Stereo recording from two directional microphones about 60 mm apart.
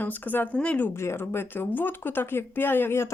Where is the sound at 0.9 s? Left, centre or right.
Left.